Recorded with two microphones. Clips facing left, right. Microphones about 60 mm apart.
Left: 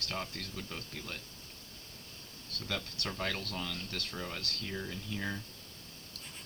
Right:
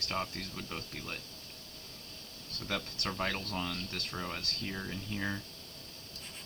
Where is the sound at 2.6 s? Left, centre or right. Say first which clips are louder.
Right 1 dB; right.